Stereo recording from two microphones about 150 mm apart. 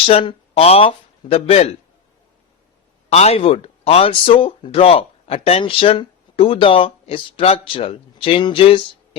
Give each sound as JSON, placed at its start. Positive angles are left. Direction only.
{"t": 0.0, "sound": "speech", "side_deg": 40}
{"t": 3.1, "sound": "speech", "side_deg": 45}